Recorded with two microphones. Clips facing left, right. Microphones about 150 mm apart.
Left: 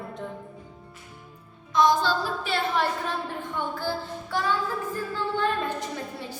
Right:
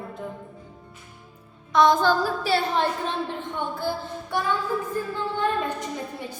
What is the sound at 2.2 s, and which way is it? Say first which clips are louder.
Speech: right 4 dB; 35° right (ahead or behind).